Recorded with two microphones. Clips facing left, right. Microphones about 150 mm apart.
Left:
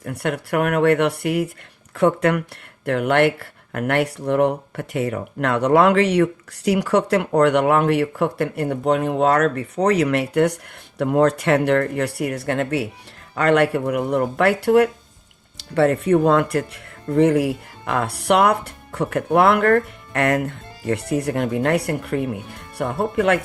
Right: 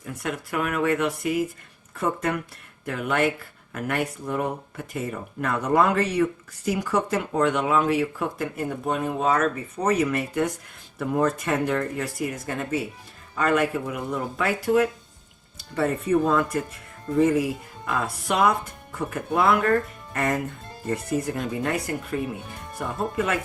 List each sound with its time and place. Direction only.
0.0 s speech: 65° left (ahead or behind)